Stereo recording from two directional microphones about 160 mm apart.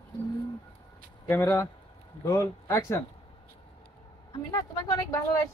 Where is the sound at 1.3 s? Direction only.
20° left (ahead or behind).